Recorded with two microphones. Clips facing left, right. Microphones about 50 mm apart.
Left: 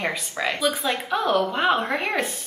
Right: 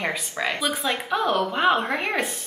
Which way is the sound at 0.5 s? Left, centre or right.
Centre.